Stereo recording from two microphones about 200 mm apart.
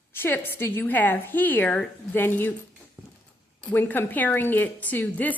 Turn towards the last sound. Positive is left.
turn(degrees=10)  # may be behind; listen again after turning